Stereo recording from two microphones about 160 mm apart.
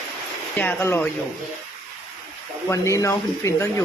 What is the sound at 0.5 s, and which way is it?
Speech, 10° left (ahead or behind).